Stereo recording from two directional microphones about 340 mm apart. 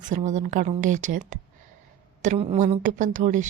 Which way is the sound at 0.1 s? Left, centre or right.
Right.